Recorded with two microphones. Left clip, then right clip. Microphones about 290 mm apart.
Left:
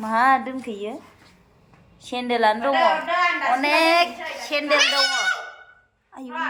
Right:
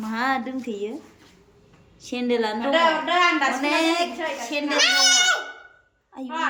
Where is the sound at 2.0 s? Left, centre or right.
Centre.